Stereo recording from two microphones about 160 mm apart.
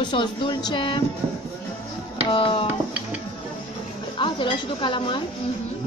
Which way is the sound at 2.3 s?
35° left (ahead or behind).